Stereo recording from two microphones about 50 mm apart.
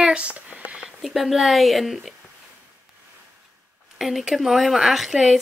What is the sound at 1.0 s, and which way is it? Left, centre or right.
Speech, centre.